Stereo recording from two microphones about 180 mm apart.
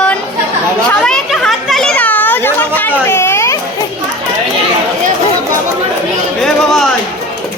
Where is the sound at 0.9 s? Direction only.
5° left (ahead or behind).